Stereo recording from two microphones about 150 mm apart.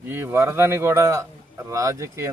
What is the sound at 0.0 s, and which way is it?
Speech, 15° right (ahead or behind).